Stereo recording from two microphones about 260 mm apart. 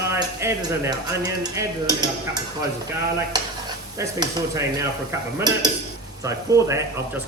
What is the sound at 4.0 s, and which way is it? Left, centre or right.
Speech, centre.